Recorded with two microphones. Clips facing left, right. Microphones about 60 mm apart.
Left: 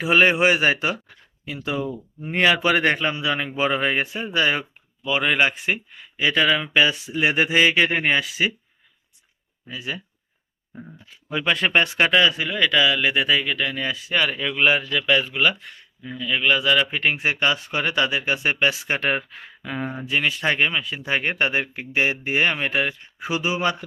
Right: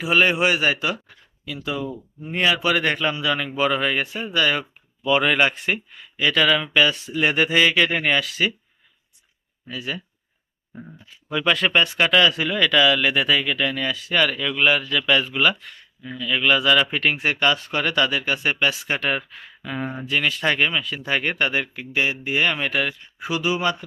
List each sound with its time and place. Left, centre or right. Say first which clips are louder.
0.0 s a man's voice: left 2 dB; left
5.0 s speech: right 2 dB; centre
9.6 s speech: right 1 dB; centre
11.3 s a man's voice: right 1 dB; left
12.1 s speech: right 1 dB; centre
14.3 s speech: even; left
18.0 s a man's voice: even; left
19.8 s speech: even; centre
21.7 s a man's voice: left 1 dB; left
22.5 s a man's voice: even; left